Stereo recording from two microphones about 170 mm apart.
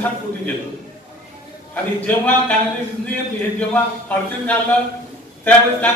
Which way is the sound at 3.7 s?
10° left (ahead or behind).